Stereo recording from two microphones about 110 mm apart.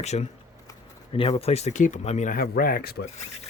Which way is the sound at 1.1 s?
60° left (ahead or behind).